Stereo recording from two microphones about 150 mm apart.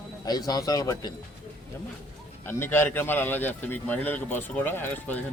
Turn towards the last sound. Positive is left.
turn(degrees=10)  # may be behind; listen again after turning